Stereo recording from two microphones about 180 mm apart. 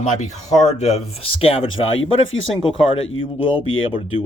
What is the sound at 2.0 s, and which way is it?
Speech, 90° left.